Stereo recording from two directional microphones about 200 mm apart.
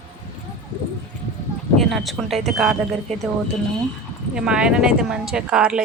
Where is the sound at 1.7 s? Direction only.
Centre (ahead or behind).